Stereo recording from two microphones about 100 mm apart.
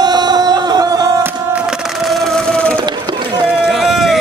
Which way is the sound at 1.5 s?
5° right (ahead or behind).